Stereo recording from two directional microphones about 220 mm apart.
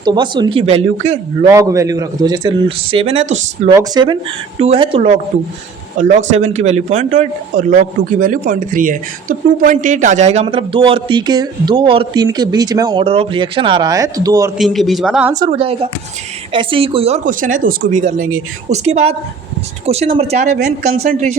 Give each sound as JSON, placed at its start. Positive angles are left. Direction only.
{"t": 0.0, "sound": "a man's voice", "side_deg": -20}
{"t": 1.5, "sound": "a man's voice", "side_deg": -15}
{"t": 14.6, "sound": "speech", "side_deg": 0}
{"t": 15.4, "sound": "a man's voice", "side_deg": -25}